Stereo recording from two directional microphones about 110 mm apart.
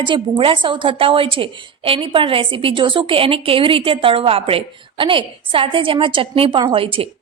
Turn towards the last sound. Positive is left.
turn(degrees=-55)  # may be behind; listen again after turning